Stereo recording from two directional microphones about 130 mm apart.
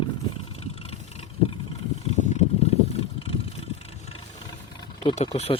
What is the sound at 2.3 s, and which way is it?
Vehicle, 55° left (ahead or behind).